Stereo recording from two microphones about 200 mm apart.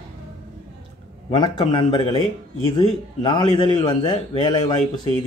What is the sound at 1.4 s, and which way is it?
A man's voice, 20° left (ahead or behind).